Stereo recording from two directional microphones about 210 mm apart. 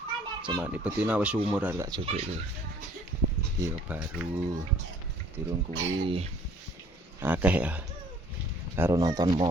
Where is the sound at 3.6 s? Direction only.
10° right (ahead or behind).